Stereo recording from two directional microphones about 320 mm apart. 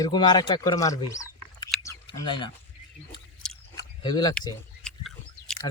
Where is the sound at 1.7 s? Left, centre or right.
Centre.